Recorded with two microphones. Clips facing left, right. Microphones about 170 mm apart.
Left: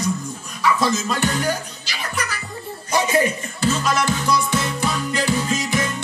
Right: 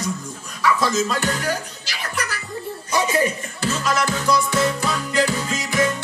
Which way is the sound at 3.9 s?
20° left (ahead or behind).